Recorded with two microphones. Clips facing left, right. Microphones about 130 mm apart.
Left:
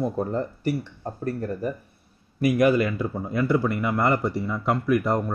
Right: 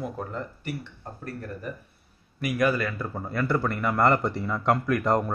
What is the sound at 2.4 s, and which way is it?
A man's voice, 20° left (ahead or behind).